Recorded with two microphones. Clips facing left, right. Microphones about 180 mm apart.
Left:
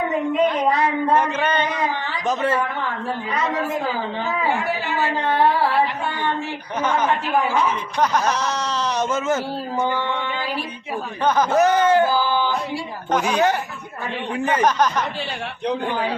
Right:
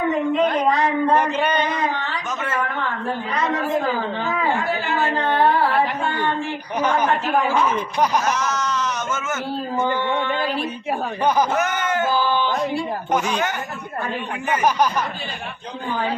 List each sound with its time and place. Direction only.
1.1 s a sound: 10° right (ahead or behind)
2.2 s a man's voice: 35° left (ahead or behind)
8.3 s speech: 35° left (ahead or behind)
11.5 s speech: 35° left (ahead or behind)